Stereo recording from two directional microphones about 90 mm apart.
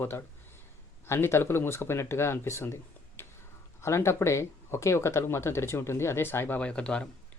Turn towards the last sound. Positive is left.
turn(degrees=10)  # may be behind; listen again after turning